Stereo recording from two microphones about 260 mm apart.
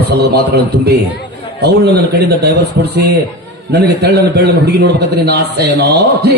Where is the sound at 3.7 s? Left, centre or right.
Right.